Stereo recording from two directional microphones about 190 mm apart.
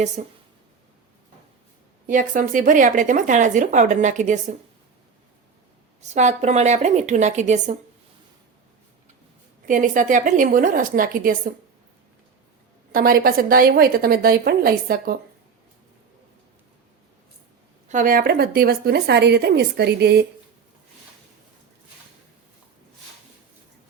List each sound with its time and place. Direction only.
0.2 s a woman's voice: 40° right (ahead or behind)
2.0 s a woman's voice: 45° right (ahead or behind)
6.0 s a woman's voice: 35° right (ahead or behind)
9.6 s speech: 45° right (ahead or behind)
12.9 s speech: 50° right (ahead or behind)
17.8 s a woman's voice: 45° right (ahead or behind); by 20.2 s 60° right (ahead or behind)